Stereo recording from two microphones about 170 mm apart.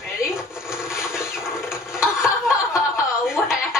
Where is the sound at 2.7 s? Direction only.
5° right (ahead or behind).